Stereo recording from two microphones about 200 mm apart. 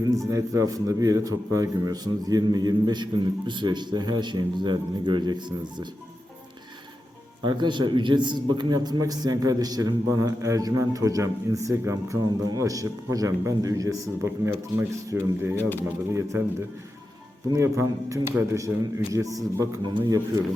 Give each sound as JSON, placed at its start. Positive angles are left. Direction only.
{"t": 0.3, "sound": "a man's voice", "side_deg": -15}
{"t": 7.4, "sound": "a man's voice", "side_deg": -25}